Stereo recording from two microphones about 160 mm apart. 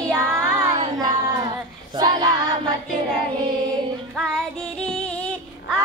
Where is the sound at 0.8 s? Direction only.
30° right (ahead or behind).